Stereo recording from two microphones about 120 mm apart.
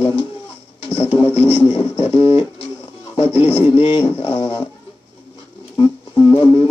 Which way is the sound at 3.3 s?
60° left (ahead or behind).